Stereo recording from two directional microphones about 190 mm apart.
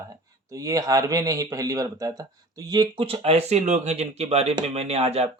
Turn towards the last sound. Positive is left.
turn(degrees=-35)  # may be behind; listen again after turning